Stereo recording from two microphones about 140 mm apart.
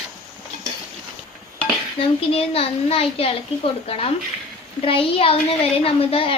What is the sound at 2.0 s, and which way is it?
A woman's voice, 40° left (ahead or behind).